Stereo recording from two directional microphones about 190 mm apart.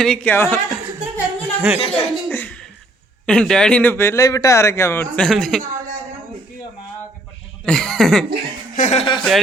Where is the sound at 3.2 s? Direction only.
5° left (ahead or behind).